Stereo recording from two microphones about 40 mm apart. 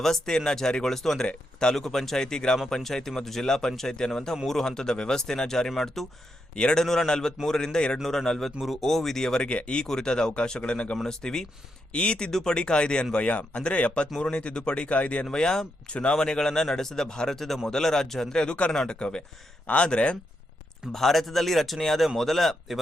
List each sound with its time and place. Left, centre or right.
0.0 s speech: centre
6.5 s speech: left
9.5 s speech: left
9.8 s speech: centre
11.9 s speech: left
15.3 s speech: centre
15.9 s speech: left
16.1 s speech: centre
20.9 s speech: centre